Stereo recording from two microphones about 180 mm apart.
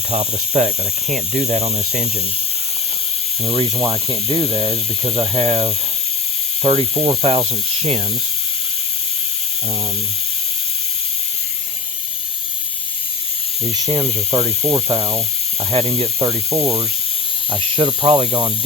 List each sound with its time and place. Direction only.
0.1 s speech: 35° right (ahead or behind)
3.4 s speech: 35° right (ahead or behind)
13.7 s speech: 20° right (ahead or behind)
16.5 s speech: 15° right (ahead or behind)
17.5 s speech: 25° right (ahead or behind)